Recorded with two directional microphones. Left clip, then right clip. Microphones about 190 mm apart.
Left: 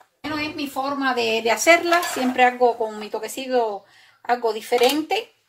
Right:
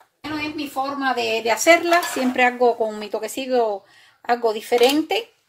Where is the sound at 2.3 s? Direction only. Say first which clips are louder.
Even; 45° right (ahead or behind).